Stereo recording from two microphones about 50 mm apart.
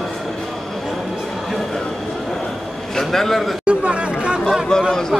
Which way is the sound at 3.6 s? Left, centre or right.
Right.